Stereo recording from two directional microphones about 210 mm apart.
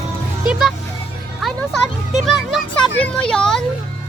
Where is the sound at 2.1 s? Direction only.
Centre (ahead or behind).